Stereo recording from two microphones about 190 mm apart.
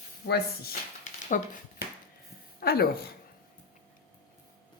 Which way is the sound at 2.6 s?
50° left (ahead or behind).